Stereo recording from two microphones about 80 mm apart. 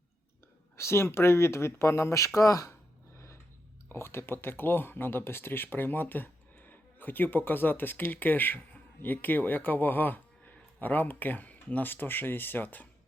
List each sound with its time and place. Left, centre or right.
0.8 s speech: left
3.8 s speech: left